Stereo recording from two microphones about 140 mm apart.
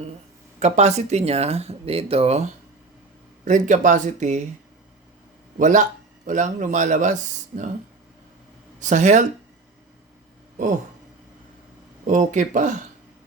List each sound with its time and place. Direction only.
0.6 s speech: 50° right (ahead or behind)
3.4 s speech: 60° right (ahead or behind)
5.5 s speech: 65° right (ahead or behind)
8.8 s speech: 60° right (ahead or behind)
12.0 s speech: 60° right (ahead or behind)